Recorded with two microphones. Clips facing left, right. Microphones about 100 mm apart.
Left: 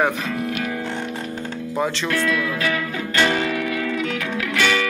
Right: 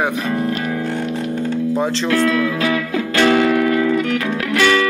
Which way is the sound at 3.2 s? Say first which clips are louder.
Right 6 dB; 60° right (ahead or behind).